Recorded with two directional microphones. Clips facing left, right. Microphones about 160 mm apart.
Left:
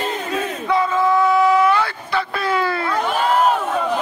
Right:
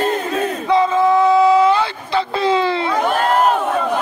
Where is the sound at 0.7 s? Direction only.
20° right (ahead or behind).